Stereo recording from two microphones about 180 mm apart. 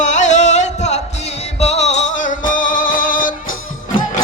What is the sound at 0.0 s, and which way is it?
Music, 40° left (ahead or behind).